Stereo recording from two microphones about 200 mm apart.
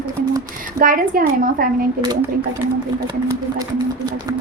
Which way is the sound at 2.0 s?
25° right (ahead or behind).